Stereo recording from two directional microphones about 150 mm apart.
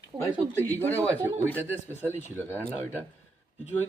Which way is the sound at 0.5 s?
15° left (ahead or behind).